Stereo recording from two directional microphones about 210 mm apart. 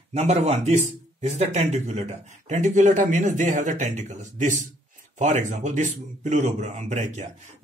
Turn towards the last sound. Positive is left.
turn(degrees=-35)  # may be behind; listen again after turning